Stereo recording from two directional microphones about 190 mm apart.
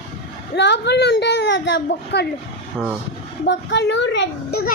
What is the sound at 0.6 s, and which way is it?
A child's voice, 65° left (ahead or behind).